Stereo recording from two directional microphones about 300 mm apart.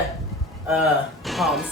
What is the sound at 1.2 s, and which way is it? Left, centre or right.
Speech, centre.